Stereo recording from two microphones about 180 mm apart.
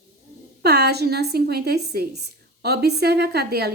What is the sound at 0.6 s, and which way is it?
A woman's voice, 65° right (ahead or behind).